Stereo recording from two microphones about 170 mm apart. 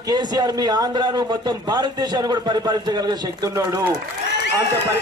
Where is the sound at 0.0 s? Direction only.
25° right (ahead or behind).